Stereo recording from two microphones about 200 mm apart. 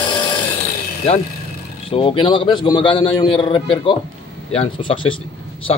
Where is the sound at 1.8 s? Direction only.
25° left (ahead or behind).